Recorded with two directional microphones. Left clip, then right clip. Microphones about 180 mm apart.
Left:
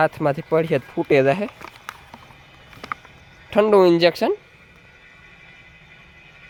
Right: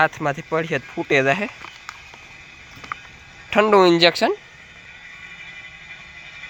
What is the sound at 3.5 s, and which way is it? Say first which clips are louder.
Speech: even; 20° left (ahead or behind).